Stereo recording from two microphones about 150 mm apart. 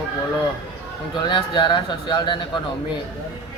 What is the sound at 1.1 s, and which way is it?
Speech, 30° left (ahead or behind).